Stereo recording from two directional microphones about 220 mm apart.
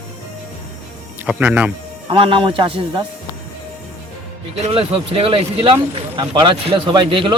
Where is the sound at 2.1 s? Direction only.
25° right (ahead or behind).